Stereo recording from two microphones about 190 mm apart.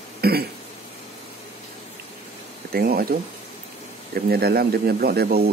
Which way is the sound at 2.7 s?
50° right (ahead or behind).